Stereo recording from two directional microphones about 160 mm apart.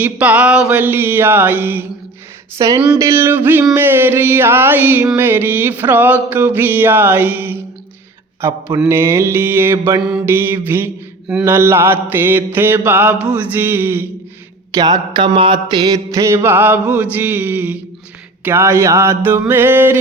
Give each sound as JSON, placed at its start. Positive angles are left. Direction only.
{"t": 0.0, "sound": "mantra", "side_deg": -10}
{"t": 2.6, "sound": "speech", "side_deg": -20}
{"t": 3.0, "sound": "mantra", "side_deg": -15}
{"t": 14.7, "sound": "mantra", "side_deg": -25}